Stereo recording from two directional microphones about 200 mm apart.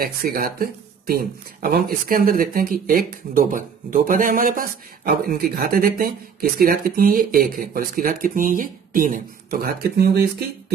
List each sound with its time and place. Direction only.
0.0 s speech: 45° right (ahead or behind)